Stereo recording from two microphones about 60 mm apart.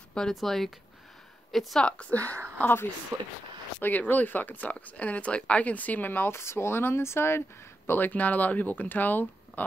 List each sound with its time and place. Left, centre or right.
0.3 s speech: centre
1.9 s speech: left
2.6 s speech: left
3.1 s speech: right
3.8 s speech: left
8.0 s speech: left